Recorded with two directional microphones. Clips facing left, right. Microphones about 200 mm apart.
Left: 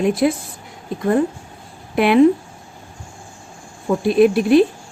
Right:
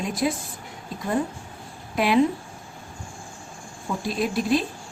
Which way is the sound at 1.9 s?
60° left (ahead or behind).